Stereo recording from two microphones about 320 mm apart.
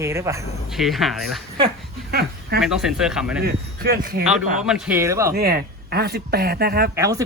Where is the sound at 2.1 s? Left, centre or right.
Right.